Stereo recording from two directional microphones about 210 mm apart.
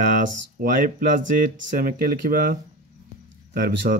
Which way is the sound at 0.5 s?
40° right (ahead or behind).